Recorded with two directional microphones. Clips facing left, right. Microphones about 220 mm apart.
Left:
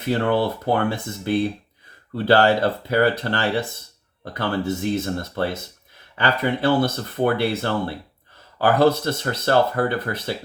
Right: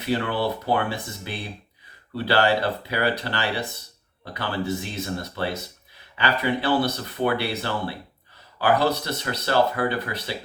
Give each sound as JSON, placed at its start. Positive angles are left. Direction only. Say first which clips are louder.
{"t": 0.1, "sound": "speech", "louder": "left 4 dB", "side_deg": 45}